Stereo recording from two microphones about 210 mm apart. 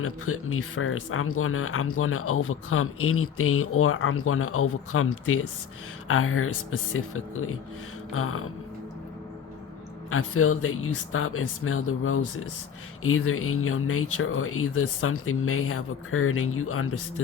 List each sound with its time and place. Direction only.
0.0 s speech: 85° left
10.1 s speech: 80° left